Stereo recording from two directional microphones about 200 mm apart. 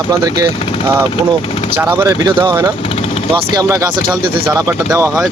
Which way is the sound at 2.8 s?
30° left (ahead or behind).